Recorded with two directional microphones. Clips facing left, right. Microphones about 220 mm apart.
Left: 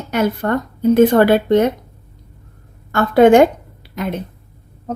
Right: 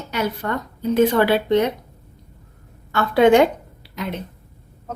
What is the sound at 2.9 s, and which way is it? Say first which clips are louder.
Speech: left 4 dB; 45° left (ahead or behind).